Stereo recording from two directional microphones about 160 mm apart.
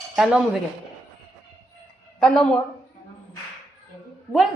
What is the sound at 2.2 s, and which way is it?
Speech, 5° left (ahead or behind).